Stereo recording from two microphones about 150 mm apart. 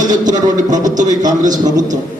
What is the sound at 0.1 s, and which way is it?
A man's voice, 25° right (ahead or behind).